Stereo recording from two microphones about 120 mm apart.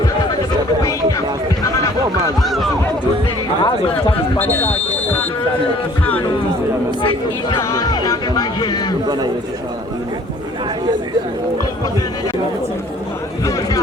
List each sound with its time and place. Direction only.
2.4 s a sound: centre (ahead or behind)
3.6 s chatter: 45° left (ahead or behind)
4.4 s buzzer: 15° left (ahead or behind)
7.7 s music: 30° left (ahead or behind)
9.0 s a sound: 35° right (ahead or behind)
13.4 s chatter: 30° left (ahead or behind)